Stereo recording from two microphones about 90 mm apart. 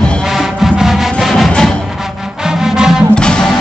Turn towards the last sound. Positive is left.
turn(degrees=10)  # may be behind; listen again after turning